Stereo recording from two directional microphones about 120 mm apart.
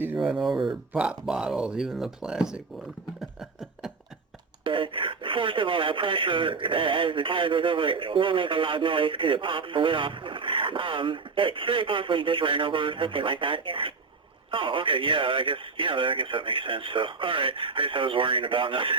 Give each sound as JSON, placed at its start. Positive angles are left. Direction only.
{"t": 0.2, "sound": "speech", "side_deg": -5}
{"t": 4.6, "sound": "speech", "side_deg": -45}